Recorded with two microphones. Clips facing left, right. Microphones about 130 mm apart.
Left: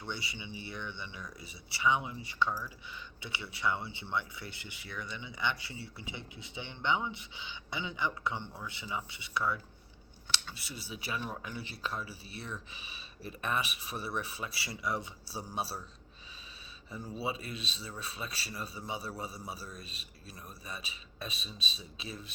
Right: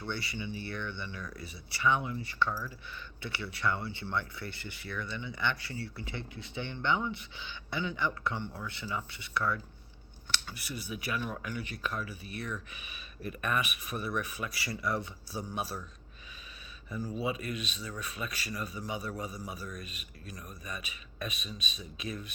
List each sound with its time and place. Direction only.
0.0 s a man's voice: 20° left (ahead or behind)
17.2 s a man's voice: 30° left (ahead or behind)